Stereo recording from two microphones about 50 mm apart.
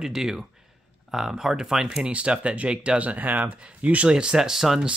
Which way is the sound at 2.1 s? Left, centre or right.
Right.